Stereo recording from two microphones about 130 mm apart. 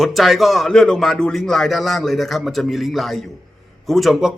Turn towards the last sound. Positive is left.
turn(degrees=-5)  # may be behind; listen again after turning